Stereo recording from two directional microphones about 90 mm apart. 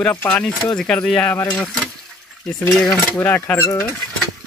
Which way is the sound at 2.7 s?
Centre (ahead or behind).